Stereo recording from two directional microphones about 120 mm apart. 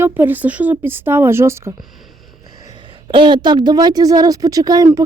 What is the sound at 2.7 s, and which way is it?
Speech, 45° right (ahead or behind).